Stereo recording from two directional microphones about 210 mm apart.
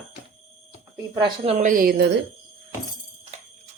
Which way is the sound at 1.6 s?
40° right (ahead or behind).